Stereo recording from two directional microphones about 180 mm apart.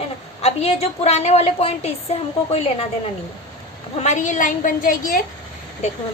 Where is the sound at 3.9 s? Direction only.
40° left (ahead or behind).